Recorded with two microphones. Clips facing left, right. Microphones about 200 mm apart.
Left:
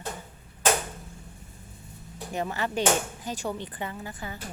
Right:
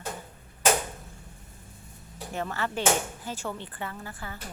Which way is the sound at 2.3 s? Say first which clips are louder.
Left 2 dB; 15° left (ahead or behind).